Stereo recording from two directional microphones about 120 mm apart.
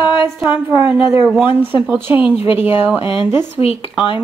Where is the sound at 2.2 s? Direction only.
50° left (ahead or behind).